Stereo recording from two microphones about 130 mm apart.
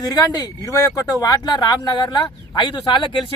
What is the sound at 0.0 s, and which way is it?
Speech, 30° left (ahead or behind).